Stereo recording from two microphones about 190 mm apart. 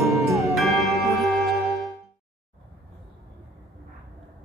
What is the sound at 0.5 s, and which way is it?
Music, centre (ahead or behind).